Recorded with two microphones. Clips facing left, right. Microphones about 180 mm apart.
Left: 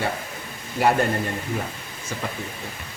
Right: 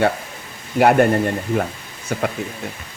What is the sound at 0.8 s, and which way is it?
Speech, 60° right (ahead or behind).